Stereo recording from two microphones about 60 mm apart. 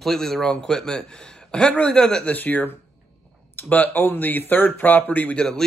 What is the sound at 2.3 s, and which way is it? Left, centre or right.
Speech, left.